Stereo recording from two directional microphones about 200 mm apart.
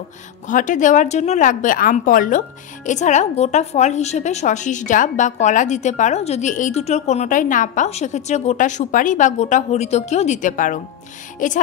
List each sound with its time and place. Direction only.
0.5 s a woman's voice: 40° left (ahead or behind)